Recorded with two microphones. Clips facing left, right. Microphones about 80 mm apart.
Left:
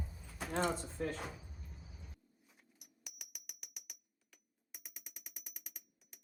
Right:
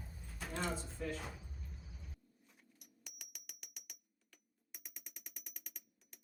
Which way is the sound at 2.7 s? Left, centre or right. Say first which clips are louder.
Left 1 dB; centre.